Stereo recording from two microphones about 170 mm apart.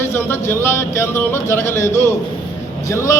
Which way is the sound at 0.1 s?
15° left (ahead or behind).